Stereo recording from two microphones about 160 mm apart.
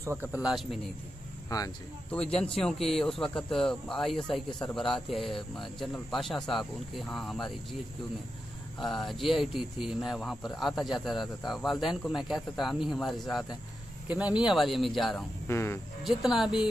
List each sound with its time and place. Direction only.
0.0 s speech: 15° right (ahead or behind)
2.0 s speech: 5° left (ahead or behind)
8.7 s speech: centre (ahead or behind)
15.4 s speech: 15° left (ahead or behind)
16.0 s speech: centre (ahead or behind)